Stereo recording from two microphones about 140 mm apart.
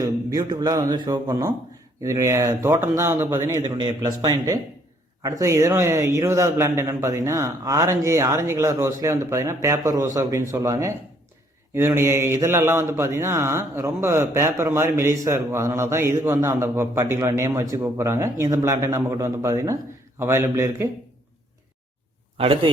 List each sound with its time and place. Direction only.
0.0 s speech: 25° right (ahead or behind)
22.4 s speech: 40° right (ahead or behind)